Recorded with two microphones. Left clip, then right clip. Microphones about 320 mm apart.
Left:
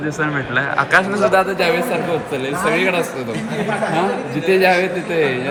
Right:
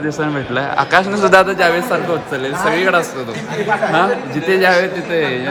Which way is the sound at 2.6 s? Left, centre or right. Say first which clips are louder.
Right 2 dB; right.